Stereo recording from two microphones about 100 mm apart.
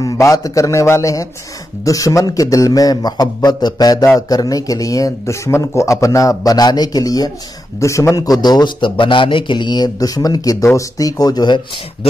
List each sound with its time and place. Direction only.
0.0 s a man's voice: 35° left (ahead or behind)